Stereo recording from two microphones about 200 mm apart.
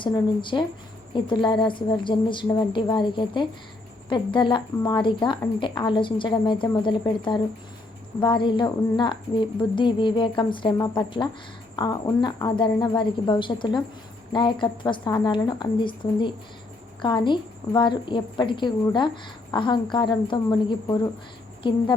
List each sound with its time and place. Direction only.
0.0 s a woman's voice: 25° left (ahead or behind)